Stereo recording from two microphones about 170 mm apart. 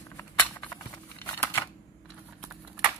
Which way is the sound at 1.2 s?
15° left (ahead or behind).